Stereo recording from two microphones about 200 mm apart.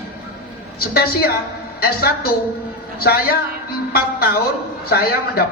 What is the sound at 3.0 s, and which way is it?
A man's voice, 50° left (ahead or behind).